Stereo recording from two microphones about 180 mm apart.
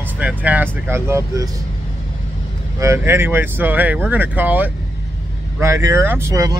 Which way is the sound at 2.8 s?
15° right (ahead or behind).